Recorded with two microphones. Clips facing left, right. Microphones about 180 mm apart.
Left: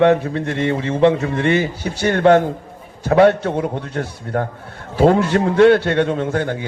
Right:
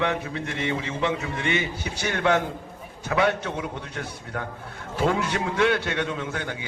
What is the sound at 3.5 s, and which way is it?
A man's voice, 50° left (ahead or behind).